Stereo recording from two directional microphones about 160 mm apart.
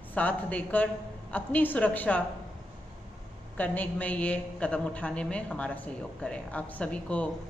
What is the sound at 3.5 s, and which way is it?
A man's voice, 10° left (ahead or behind).